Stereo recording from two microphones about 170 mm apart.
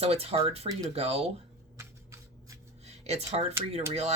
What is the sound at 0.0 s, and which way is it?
Speech, 35° right (ahead or behind).